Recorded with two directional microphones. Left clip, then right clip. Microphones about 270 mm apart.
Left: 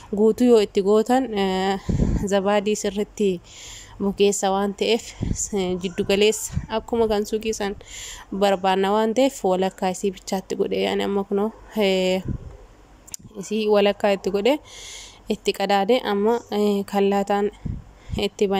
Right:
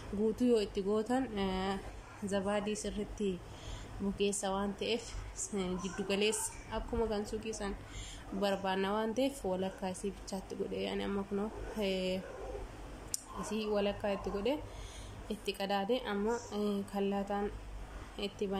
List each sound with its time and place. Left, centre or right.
0.4 s a woman's voice: left